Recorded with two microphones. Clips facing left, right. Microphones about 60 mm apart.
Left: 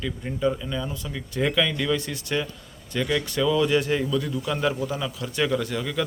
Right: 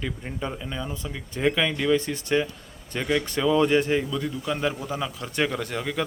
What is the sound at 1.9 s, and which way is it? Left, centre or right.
Speech, right.